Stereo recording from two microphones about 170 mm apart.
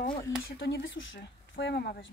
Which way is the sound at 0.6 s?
90° left.